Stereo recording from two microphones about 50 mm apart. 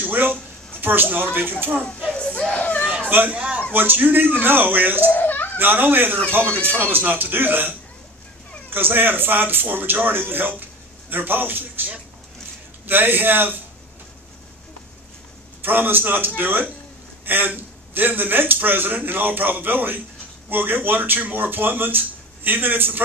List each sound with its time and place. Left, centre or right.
0.0 s a sound: right
0.8 s speech: right
1.9 s a sound: centre
3.0 s speech: right
3.3 s a man's voice: right
3.7 s speech: right
5.0 s a sound: left
5.5 s speech: right
15.6 s speech: right